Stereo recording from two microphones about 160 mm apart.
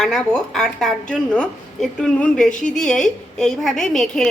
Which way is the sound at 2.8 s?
5° left (ahead or behind).